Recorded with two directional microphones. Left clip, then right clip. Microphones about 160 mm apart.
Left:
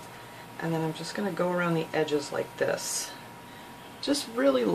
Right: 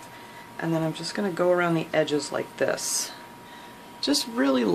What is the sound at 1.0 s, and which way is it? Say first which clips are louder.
Speech: right 4 dB; 65° right (ahead or behind).